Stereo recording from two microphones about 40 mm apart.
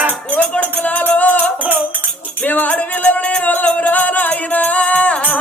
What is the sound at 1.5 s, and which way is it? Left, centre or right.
Music, right.